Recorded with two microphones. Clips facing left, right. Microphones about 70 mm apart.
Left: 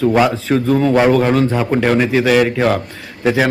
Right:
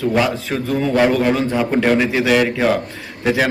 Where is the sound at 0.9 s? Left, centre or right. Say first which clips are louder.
Left 1 dB; centre.